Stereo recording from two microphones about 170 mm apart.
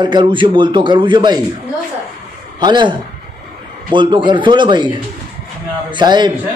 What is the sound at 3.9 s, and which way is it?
Speech, 30° right (ahead or behind).